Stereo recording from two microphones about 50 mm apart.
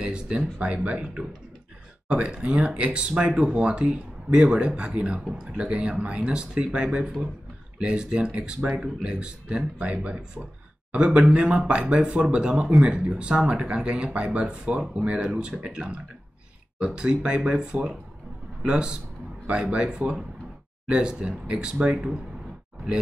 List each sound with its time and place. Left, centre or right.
0.0 s speech: right